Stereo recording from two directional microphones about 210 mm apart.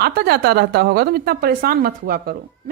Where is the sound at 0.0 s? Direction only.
45° right (ahead or behind).